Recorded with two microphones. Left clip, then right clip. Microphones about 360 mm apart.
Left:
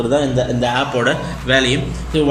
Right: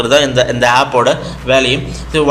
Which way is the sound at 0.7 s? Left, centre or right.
Centre.